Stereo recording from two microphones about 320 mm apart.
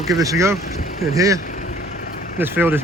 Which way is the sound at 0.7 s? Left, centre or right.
Left.